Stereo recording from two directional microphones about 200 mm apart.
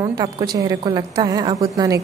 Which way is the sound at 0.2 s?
20° right (ahead or behind).